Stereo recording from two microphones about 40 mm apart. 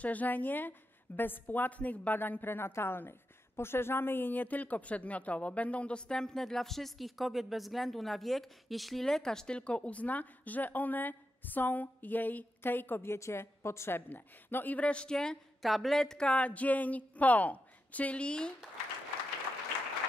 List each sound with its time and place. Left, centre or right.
0.0 s a woman's voice: left; by 9.0 s centre
9.0 s a woman's voice: centre; by 14.0 s left
14.0 s a woman's voice: left
14.8 s speech: left
15.6 s speech: centre
16.0 s speech: centre
16.3 s a woman's voice: left